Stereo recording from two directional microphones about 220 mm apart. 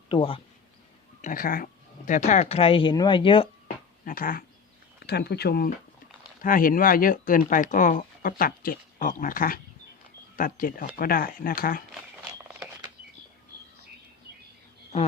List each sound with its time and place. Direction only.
0.1 s speech: 25° left (ahead or behind)
1.2 s speech: 40° left (ahead or behind)
4.0 s speech: 40° left (ahead or behind)
12.2 s a sound: 15° right (ahead or behind)